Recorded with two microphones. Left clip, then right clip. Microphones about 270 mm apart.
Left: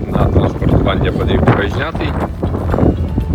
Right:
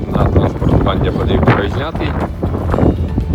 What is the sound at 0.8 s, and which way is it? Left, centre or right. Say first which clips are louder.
Speech: even; centre.